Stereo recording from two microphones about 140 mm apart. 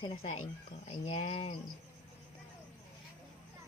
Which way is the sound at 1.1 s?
50° left (ahead or behind).